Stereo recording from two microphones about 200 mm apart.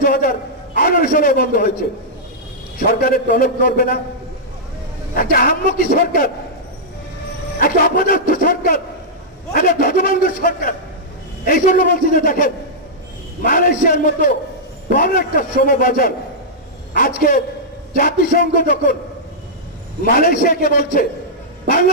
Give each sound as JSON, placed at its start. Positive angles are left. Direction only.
{"t": 0.0, "sound": "a man's voice", "side_deg": 45}
{"t": 2.8, "sound": "a man's voice", "side_deg": 45}
{"t": 5.1, "sound": "a man's voice", "side_deg": 45}
{"t": 7.6, "sound": "a man's voice", "side_deg": 45}
{"t": 20.0, "sound": "a man's voice", "side_deg": 45}